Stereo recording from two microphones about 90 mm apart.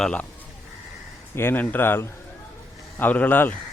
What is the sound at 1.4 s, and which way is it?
Speech, 25° left (ahead or behind).